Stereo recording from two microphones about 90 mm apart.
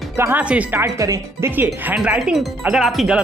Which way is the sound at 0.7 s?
35° right (ahead or behind).